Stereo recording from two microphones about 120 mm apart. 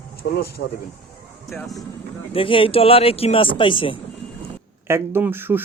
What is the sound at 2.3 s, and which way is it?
Speech, 45° left (ahead or behind).